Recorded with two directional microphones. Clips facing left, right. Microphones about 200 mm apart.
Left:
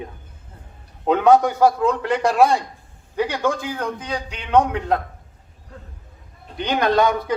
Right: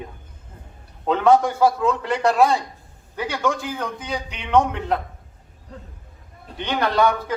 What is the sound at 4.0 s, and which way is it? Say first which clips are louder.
Speech: left 1 dB; 5° right (ahead or behind).